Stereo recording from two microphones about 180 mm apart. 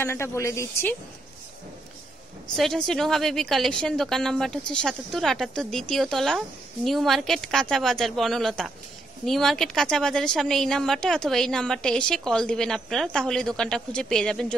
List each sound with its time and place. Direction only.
0.0 s speech: 15° left (ahead or behind)
2.5 s a woman's voice: centre (ahead or behind)